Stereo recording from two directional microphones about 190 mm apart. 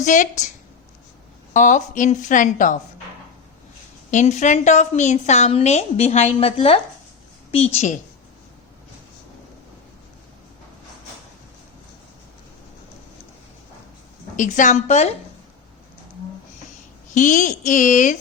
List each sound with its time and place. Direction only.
0.0 s a woman's voice: 40° left (ahead or behind)
1.5 s a woman's voice: 40° left (ahead or behind)
4.1 s a woman's voice: 40° left (ahead or behind)
14.3 s a woman's voice: 40° left (ahead or behind)
17.2 s a woman's voice: 40° left (ahead or behind)